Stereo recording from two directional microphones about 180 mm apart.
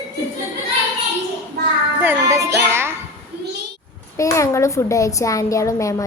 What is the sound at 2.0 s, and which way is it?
Music, 15° right (ahead or behind).